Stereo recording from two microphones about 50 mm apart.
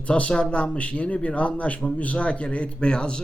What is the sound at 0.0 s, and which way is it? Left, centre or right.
Speech, left.